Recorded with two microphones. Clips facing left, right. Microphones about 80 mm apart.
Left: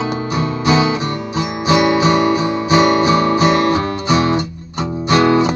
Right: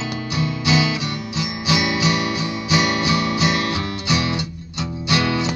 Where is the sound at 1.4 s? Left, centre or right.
Left.